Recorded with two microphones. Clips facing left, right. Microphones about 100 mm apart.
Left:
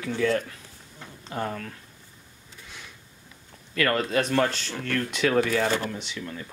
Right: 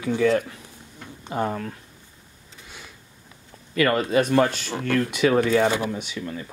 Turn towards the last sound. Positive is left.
turn(degrees=-5)  # may be behind; listen again after turning